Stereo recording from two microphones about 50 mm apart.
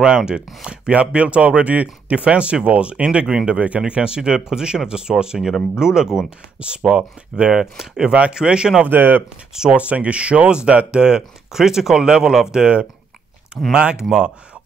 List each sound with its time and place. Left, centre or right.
0.0 s speech: centre
8.8 s speech: right
9.5 s speech: centre
9.8 s speech: right